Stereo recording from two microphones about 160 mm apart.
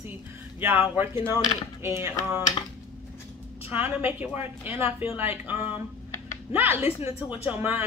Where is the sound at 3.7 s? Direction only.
10° right (ahead or behind).